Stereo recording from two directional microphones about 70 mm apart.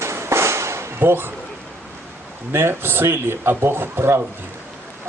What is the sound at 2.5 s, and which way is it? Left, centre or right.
A man's voice, right.